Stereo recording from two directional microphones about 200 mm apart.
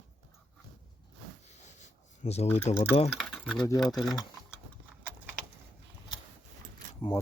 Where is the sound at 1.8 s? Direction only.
30° left (ahead or behind).